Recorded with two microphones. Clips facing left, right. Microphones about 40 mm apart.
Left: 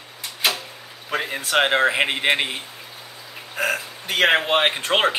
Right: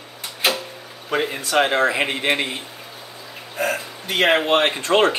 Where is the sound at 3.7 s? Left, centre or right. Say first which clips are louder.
Even; centre.